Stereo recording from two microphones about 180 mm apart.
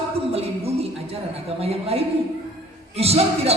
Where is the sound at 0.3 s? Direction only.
35° right (ahead or behind).